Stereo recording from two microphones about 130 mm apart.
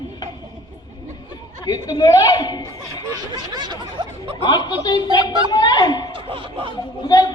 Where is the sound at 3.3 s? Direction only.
35° right (ahead or behind).